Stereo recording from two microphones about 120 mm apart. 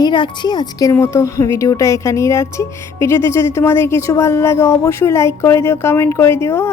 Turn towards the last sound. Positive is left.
turn(degrees=20)  # may be behind; listen again after turning